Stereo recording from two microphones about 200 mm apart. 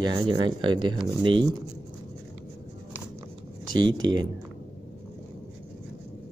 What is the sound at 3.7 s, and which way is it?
Speech, 20° right (ahead or behind).